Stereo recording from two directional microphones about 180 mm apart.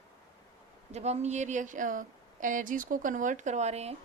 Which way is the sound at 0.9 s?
40° right (ahead or behind).